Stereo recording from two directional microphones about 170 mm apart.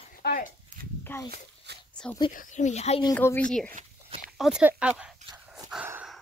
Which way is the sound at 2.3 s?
50° left (ahead or behind).